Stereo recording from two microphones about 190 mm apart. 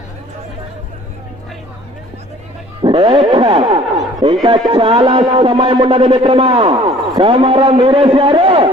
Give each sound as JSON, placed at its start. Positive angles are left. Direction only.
{"t": 2.8, "sound": "speech", "side_deg": -25}